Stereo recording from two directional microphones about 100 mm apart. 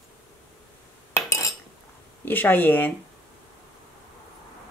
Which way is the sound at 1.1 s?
30° left (ahead or behind).